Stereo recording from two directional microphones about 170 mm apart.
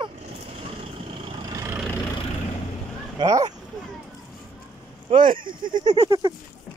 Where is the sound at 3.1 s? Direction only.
20° right (ahead or behind).